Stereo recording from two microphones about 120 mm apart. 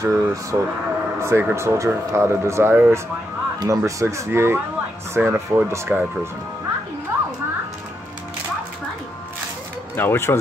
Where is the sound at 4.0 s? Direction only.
25° right (ahead or behind).